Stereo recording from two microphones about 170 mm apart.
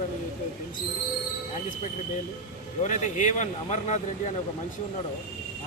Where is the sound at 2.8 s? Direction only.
45° left (ahead or behind).